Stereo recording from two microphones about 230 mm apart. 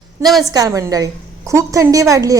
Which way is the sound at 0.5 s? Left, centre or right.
Centre.